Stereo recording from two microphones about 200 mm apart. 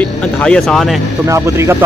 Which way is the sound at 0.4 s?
5° left (ahead or behind).